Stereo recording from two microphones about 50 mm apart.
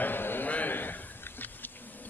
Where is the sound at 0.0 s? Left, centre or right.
Left.